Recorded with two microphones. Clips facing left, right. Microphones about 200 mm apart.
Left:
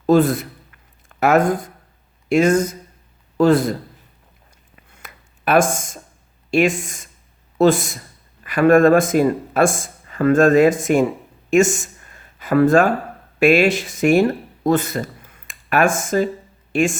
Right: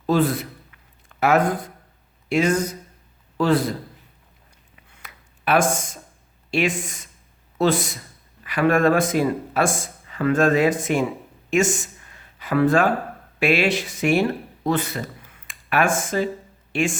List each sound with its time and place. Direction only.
0.0 s a man's voice: 45° left (ahead or behind)
4.9 s a sound: 45° left (ahead or behind)
6.5 s speech: 50° left (ahead or behind)